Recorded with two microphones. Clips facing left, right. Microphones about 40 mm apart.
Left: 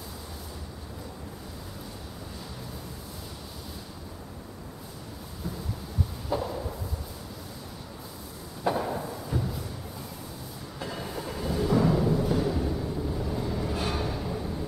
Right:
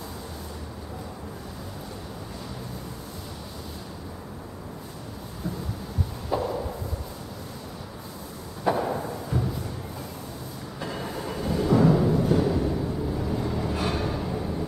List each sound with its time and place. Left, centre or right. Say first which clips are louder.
6.3 s a sound: right 3 dB; centre
8.6 s thump: right 3 dB; centre
10.8 s timpani: right 2 dB; centre